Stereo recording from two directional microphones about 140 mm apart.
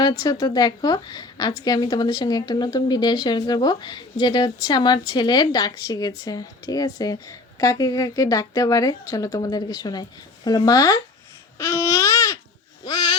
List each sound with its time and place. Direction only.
0.0 s a woman's voice: 30° left (ahead or behind)
11.5 s babbling: 20° left (ahead or behind)
12.8 s a sound: 30° left (ahead or behind)